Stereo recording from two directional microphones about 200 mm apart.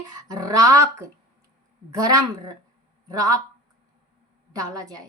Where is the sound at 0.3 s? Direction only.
15° right (ahead or behind).